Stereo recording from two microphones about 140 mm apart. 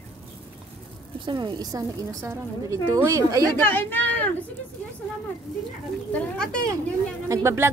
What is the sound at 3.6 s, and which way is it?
Speech, 15° left (ahead or behind).